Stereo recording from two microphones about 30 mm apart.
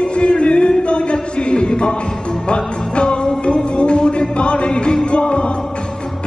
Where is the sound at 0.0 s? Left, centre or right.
Left.